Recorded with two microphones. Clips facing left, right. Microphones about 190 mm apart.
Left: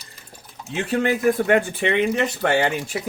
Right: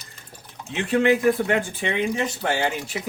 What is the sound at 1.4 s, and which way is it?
Speech, 60° left (ahead or behind).